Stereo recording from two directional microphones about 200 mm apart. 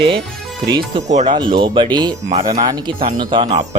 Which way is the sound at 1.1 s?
35° right (ahead or behind).